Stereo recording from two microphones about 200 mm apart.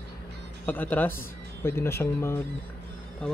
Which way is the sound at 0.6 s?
10° left (ahead or behind).